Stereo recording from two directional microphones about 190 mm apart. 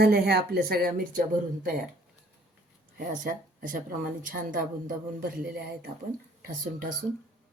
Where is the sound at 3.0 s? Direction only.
45° right (ahead or behind).